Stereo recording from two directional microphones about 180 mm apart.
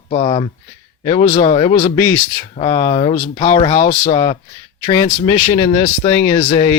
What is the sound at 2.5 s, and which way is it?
Speech, 35° left (ahead or behind).